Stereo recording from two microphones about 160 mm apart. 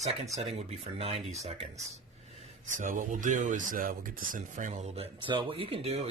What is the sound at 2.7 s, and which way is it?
Speech, 55° right (ahead or behind).